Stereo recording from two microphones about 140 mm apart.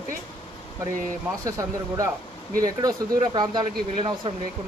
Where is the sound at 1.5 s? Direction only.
25° right (ahead or behind).